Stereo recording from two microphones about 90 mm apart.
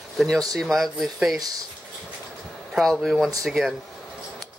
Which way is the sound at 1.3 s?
45° right (ahead or behind).